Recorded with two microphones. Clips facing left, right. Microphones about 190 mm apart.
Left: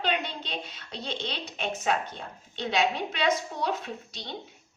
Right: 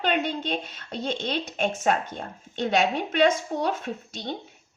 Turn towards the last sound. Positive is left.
turn(degrees=-50)  # may be behind; listen again after turning